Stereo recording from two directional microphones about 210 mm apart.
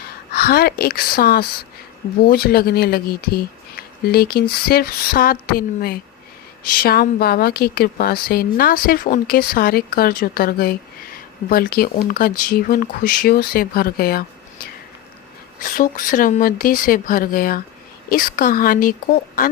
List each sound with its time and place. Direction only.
0.3 s speech: 45° left (ahead or behind)
15.6 s speech: 40° left (ahead or behind)